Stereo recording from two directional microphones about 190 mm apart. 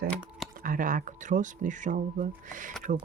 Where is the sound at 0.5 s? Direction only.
45° right (ahead or behind).